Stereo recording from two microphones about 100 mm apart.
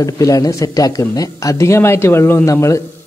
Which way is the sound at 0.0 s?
35° left (ahead or behind).